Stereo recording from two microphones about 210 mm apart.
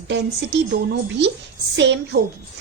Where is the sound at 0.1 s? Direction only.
55° right (ahead or behind).